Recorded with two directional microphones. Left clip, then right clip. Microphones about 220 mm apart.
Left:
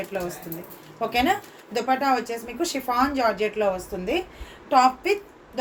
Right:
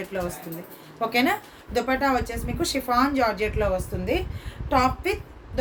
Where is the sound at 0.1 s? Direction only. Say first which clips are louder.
Even; 15° right (ahead or behind).